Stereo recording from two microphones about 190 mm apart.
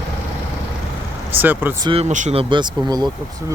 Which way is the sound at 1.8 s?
30° right (ahead or behind).